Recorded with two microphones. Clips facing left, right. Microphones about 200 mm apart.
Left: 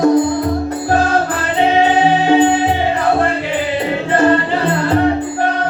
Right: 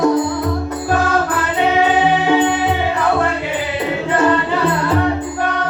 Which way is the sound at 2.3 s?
30° left (ahead or behind).